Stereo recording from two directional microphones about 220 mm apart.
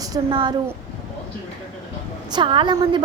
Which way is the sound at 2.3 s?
20° right (ahead or behind).